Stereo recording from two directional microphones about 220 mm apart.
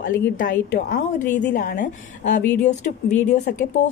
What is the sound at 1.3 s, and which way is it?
Speech, 35° left (ahead or behind).